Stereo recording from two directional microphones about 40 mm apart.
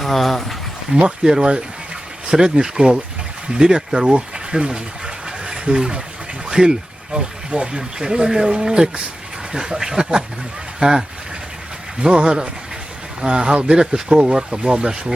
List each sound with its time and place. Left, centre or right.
0.0 s speech: centre
1.0 s speech: right
4.7 s a sound: right
6.5 s speech: centre
12.0 s speech: right